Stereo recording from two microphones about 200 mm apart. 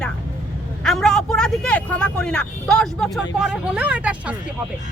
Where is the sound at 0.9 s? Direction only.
Centre (ahead or behind).